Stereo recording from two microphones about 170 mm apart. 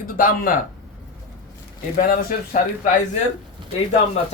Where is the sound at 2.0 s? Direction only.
55° left (ahead or behind).